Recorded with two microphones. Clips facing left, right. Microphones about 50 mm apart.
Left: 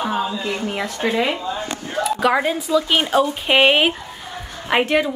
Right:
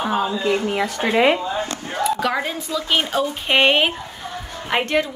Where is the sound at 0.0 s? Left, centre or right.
Centre.